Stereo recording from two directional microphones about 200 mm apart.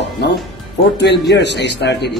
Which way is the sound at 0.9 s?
55° left (ahead or behind).